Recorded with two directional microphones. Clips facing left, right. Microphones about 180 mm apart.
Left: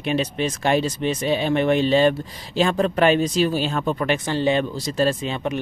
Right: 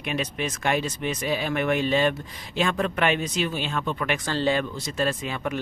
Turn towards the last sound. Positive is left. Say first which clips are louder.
# left 5 dB
turn(degrees=25)  # may be behind; listen again after turning